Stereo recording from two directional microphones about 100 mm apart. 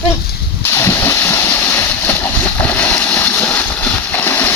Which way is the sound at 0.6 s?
25° left (ahead or behind).